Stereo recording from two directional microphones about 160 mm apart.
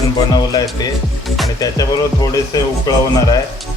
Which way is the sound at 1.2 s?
Centre (ahead or behind).